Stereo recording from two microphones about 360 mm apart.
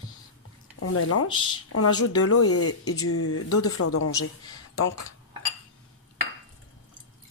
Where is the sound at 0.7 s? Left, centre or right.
Left.